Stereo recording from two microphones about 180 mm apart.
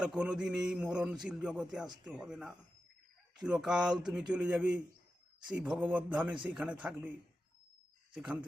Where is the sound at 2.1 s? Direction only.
5° right (ahead or behind).